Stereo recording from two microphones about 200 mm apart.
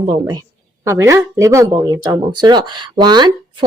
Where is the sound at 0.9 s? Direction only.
15° right (ahead or behind).